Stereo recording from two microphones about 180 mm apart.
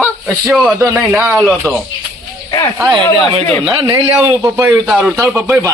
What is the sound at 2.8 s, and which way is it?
Speech, 25° right (ahead or behind).